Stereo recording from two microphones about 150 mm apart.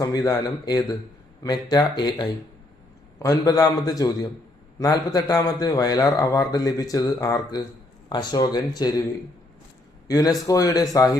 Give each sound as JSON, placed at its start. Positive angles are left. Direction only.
{"t": 0.0, "sound": "a man's voice", "side_deg": 25}
{"t": 10.1, "sound": "a man's voice", "side_deg": 25}